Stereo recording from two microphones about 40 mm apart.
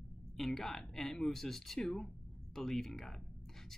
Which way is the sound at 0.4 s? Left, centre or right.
Centre.